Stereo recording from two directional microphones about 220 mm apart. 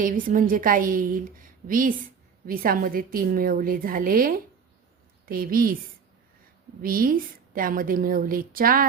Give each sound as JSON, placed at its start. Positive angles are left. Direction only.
{"t": 0.0, "sound": "a woman's voice", "side_deg": -40}
{"t": 6.8, "sound": "a woman's voice", "side_deg": -40}